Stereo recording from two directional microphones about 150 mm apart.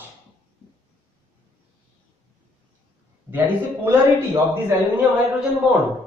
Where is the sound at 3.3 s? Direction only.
10° right (ahead or behind).